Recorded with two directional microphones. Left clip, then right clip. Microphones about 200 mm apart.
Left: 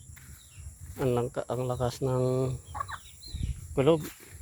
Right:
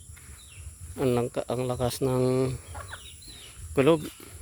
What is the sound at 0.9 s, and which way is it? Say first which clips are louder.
Speech: right 3 dB; 40° right (ahead or behind).